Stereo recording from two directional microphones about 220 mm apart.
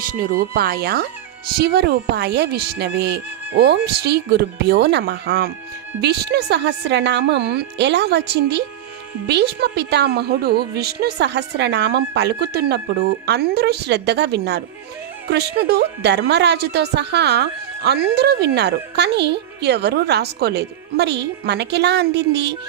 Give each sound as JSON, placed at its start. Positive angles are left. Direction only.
{"t": 0.2, "sound": "speech", "side_deg": -45}